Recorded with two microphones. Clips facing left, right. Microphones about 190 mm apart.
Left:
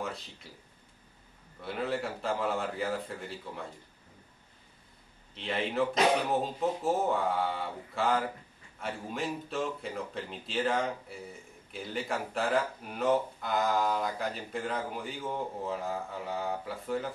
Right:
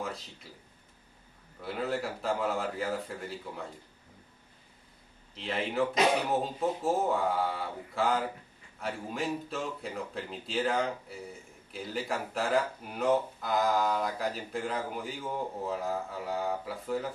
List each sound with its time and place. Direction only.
1.6 s speech: centre (ahead or behind)
5.3 s speech: centre (ahead or behind)